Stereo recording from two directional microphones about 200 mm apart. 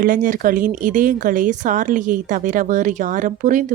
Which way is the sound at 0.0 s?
45° right (ahead or behind).